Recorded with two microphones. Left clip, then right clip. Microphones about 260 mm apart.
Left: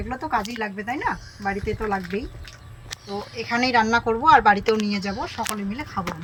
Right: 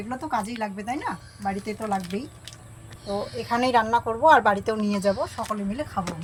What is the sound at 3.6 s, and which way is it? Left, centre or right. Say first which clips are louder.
Speech: left 1 dB; right.